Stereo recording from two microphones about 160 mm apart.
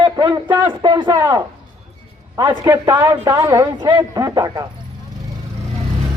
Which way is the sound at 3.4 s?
15° right (ahead or behind).